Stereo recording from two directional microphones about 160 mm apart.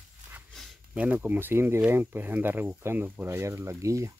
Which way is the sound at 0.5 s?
10° right (ahead or behind).